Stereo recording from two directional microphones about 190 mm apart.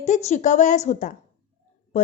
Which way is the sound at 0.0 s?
35° left (ahead or behind).